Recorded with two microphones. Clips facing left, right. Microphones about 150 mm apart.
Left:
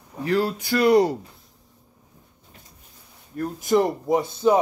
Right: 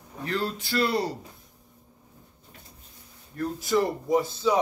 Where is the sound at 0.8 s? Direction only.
20° left (ahead or behind).